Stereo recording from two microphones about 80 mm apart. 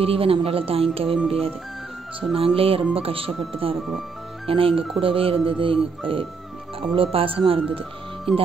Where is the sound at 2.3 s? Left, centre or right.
Centre.